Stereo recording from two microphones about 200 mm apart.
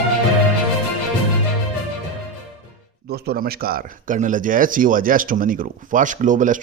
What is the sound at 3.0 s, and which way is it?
Speech, 50° right (ahead or behind).